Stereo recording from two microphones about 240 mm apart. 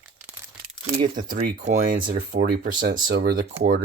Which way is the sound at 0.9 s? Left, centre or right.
Right.